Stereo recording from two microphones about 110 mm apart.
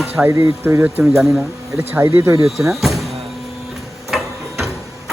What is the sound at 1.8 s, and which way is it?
Speech, 20° right (ahead or behind).